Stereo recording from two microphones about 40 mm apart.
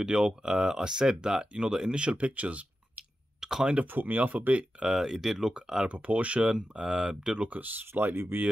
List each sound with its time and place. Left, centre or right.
0.0 s speech: right
3.3 s speech: centre
3.8 s speech: right
4.3 s speech: right
4.8 s speech: centre
5.9 s speech: right
6.5 s speech: centre
7.3 s speech: right
7.9 s speech: right